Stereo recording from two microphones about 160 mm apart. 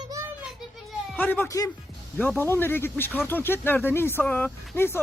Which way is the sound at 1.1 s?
10° left (ahead or behind).